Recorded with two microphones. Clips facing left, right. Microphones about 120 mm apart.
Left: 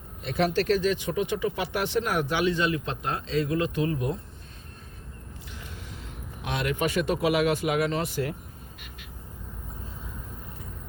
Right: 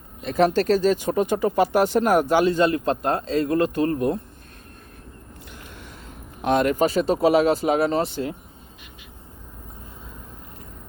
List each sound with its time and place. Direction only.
0.2 s speech: 40° right (ahead or behind)
5.5 s a sound: 55° right (ahead or behind)
6.4 s speech: 45° right (ahead or behind); by 8.4 s 25° right (ahead or behind)